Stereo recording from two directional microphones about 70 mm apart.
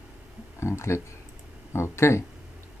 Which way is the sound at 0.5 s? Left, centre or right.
Left.